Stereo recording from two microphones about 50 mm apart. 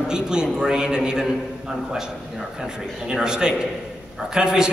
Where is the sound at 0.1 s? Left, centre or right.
Centre.